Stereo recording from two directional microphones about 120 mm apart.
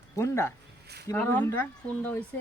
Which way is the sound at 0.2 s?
20° left (ahead or behind).